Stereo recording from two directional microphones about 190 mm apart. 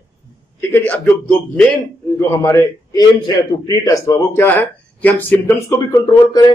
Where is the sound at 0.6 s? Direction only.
10° left (ahead or behind).